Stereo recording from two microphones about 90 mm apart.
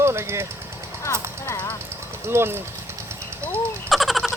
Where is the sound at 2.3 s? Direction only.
25° right (ahead or behind).